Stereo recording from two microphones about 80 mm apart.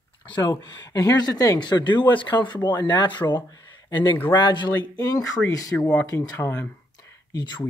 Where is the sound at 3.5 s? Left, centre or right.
Left.